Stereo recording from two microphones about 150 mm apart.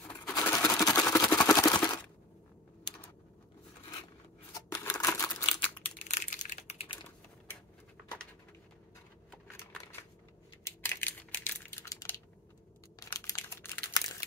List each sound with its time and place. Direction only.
0.0 s a sound: 25° left (ahead or behind)
4.7 s a sound: 25° left (ahead or behind)
5.4 s crumpling: 30° left (ahead or behind)
6.0 s typing: 55° left (ahead or behind)
10.9 s crushing: 10° left (ahead or behind)
13.0 s crumpling: 20° left (ahead or behind)